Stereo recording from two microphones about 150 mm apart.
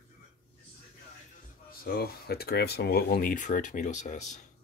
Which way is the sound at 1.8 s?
90° left.